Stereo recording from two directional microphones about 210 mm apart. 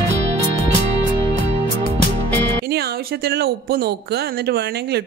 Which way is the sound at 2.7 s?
50° right (ahead or behind).